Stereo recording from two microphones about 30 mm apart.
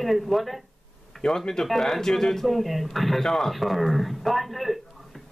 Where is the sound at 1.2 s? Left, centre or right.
Left.